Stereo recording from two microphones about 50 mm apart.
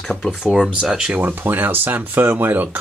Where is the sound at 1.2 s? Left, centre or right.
Right.